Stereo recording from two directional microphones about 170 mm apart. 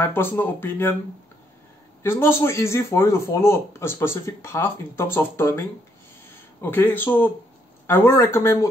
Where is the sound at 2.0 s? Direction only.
15° left (ahead or behind).